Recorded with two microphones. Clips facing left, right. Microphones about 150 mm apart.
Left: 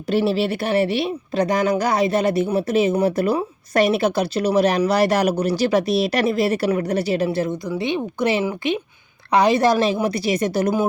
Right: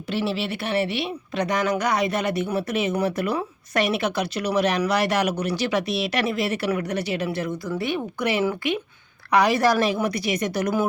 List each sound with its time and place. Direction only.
0.1 s a woman's voice: 40° left (ahead or behind)